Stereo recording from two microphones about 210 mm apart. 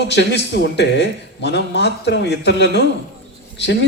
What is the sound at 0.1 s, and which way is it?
Speech, 55° left (ahead or behind).